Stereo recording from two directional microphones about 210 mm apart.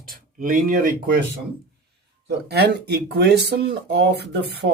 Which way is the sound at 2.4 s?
50° right (ahead or behind).